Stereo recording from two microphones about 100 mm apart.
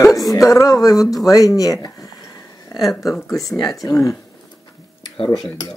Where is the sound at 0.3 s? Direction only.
35° left (ahead or behind).